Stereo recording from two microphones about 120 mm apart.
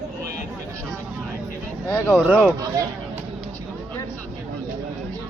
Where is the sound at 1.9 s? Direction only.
15° left (ahead or behind).